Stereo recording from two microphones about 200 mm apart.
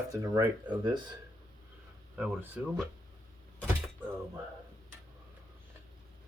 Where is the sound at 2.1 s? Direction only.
10° right (ahead or behind).